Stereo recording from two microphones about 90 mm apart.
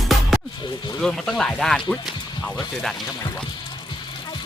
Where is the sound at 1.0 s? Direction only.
5° left (ahead or behind).